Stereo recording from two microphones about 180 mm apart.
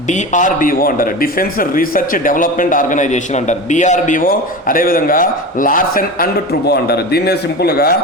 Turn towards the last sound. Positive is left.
turn(degrees=60)  # may be behind; listen again after turning